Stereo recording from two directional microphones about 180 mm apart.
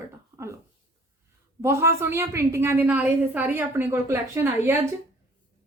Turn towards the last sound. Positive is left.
turn(degrees=-15)  # may be behind; listen again after turning